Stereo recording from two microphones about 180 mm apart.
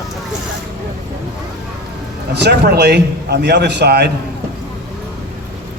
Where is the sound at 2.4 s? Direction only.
65° right (ahead or behind).